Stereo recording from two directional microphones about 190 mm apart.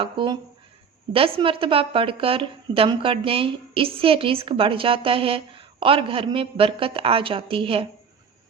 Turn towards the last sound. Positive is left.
turn(degrees=-30)  # may be behind; listen again after turning